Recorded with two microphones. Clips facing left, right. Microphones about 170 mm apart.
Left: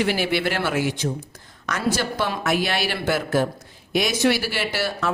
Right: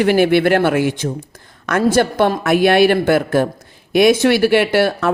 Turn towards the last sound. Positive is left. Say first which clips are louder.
# right 10 dB
turn(degrees=-55)  # may be behind; listen again after turning